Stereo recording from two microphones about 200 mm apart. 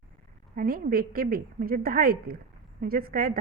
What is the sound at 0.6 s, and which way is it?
A woman's voice, 45° right (ahead or behind).